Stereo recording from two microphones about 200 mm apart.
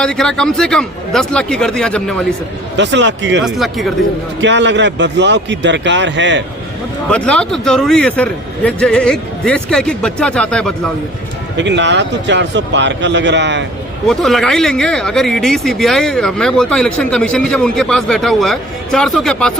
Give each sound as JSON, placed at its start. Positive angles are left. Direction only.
{"t": 0.0, "sound": "speech", "side_deg": 5}
{"t": 2.7, "sound": "speech", "side_deg": -65}
{"t": 3.4, "sound": "speech", "side_deg": 0}
{"t": 4.4, "sound": "speech", "side_deg": -60}
{"t": 7.1, "sound": "speech", "side_deg": 5}
{"t": 11.5, "sound": "speech", "side_deg": -60}
{"t": 14.1, "sound": "speech", "side_deg": 0}